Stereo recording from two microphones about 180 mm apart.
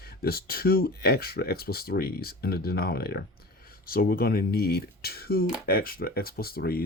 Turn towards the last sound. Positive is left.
turn(degrees=55)  # may be behind; listen again after turning